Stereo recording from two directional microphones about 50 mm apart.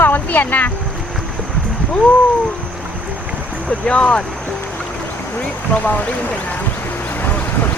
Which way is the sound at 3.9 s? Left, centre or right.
Centre.